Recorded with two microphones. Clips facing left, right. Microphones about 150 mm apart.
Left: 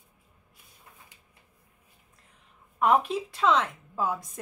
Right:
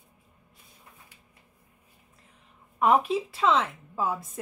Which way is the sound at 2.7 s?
Centre (ahead or behind).